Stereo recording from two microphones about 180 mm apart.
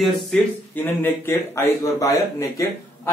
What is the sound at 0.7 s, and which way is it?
A man's voice, 10° left (ahead or behind).